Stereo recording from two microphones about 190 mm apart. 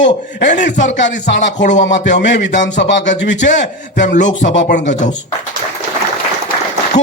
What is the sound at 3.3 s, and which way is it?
Speech, 40° left (ahead or behind).